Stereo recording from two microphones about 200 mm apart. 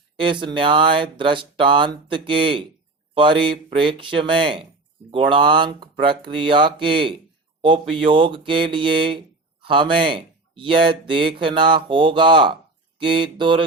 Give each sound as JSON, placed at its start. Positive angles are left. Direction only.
{"t": 0.2, "sound": "speech", "side_deg": -25}